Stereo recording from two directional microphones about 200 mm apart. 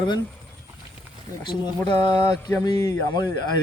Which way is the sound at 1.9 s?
20° left (ahead or behind).